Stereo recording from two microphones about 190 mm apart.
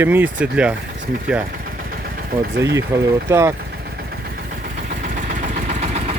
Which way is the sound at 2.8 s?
15° right (ahead or behind).